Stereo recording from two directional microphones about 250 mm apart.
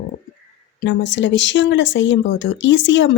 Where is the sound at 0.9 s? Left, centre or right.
Left.